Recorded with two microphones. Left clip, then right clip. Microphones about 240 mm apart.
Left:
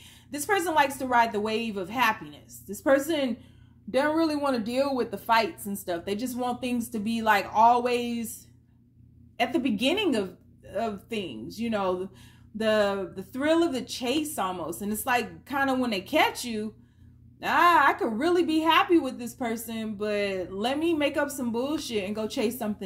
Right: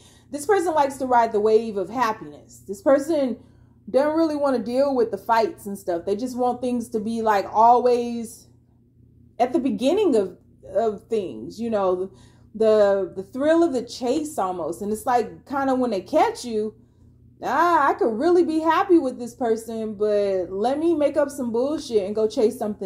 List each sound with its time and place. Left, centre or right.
0.3 s a woman's voice: left
4.1 s speech: left
4.9 s a woman's voice: left
9.4 s a woman's voice: left